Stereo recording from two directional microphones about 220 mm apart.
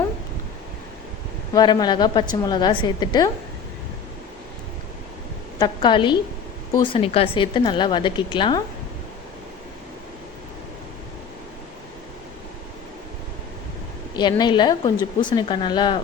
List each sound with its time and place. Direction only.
1.5 s speech: 20° left (ahead or behind)
5.5 s speech: 20° left (ahead or behind)
14.2 s speech: 20° left (ahead or behind)